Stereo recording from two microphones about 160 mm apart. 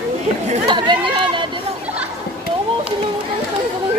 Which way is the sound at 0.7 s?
30° right (ahead or behind).